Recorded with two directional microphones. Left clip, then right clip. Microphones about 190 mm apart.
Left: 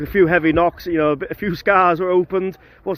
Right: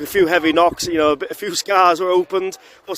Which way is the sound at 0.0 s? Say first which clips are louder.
Even; 20° right (ahead or behind).